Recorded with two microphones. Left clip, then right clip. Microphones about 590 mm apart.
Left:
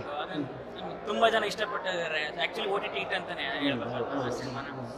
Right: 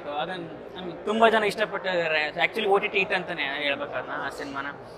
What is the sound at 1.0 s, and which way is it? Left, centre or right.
A man's voice, right.